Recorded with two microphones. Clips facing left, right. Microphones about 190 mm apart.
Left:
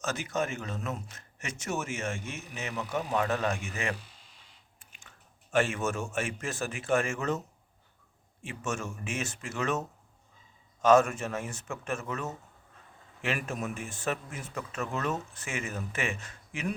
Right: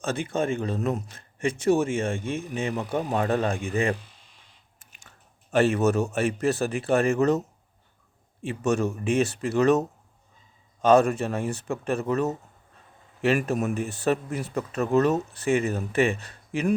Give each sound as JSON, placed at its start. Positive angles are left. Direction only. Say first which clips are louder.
{"t": 0.0, "sound": "speech", "louder": "right 5 dB", "side_deg": -30}
{"t": 5.5, "sound": "speech", "louder": "right 7 dB", "side_deg": -35}